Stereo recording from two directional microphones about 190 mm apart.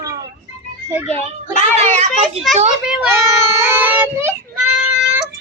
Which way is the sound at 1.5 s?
35° right (ahead or behind).